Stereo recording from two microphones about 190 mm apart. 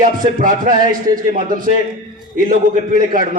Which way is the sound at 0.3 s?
45° right (ahead or behind).